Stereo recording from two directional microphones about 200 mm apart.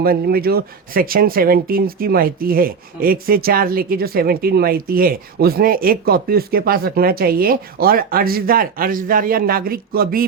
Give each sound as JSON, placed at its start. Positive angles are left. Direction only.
{"t": 0.0, "sound": "speech", "side_deg": -50}